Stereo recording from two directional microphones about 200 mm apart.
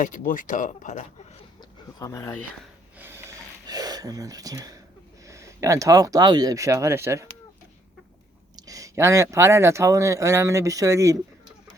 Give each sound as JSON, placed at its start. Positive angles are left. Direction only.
{"t": 0.0, "sound": "speech", "side_deg": 40}
{"t": 2.0, "sound": "speech", "side_deg": 15}
{"t": 3.0, "sound": "a sound", "side_deg": -10}
{"t": 5.2, "sound": "speech", "side_deg": -15}
{"t": 8.5, "sound": "speech", "side_deg": -15}